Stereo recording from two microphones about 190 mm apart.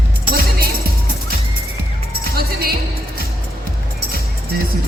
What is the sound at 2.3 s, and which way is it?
Music, 55° right (ahead or behind).